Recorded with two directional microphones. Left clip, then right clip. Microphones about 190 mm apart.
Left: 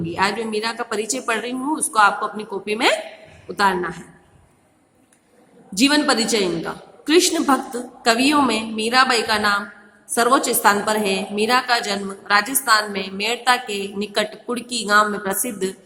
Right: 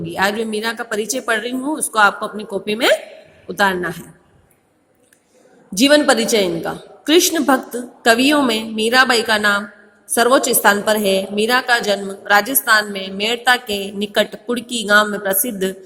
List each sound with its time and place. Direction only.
0.0 s a woman's voice: 20° right (ahead or behind)
5.7 s a woman's voice: 20° right (ahead or behind)